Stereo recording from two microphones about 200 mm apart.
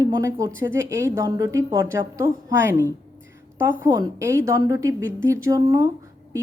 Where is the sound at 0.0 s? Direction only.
15° right (ahead or behind).